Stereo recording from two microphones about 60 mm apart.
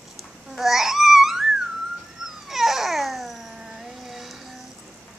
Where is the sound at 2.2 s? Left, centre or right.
Centre.